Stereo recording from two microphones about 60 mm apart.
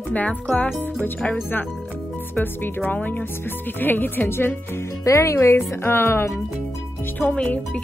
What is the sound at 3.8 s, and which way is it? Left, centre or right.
Music, left.